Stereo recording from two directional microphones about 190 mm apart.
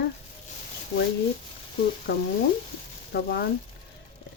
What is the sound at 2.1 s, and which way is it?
Speech, 65° left (ahead or behind).